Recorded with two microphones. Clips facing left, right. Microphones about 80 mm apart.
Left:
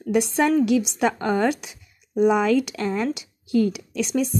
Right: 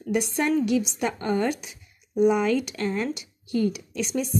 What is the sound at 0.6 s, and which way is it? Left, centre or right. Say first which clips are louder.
Speech: left 4 dB; left.